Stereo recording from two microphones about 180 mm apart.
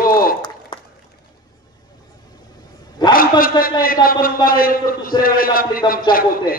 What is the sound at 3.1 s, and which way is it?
A man's voice, 55° left (ahead or behind).